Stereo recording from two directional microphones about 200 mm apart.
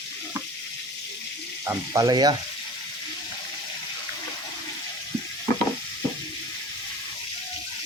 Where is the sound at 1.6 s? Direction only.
15° right (ahead or behind).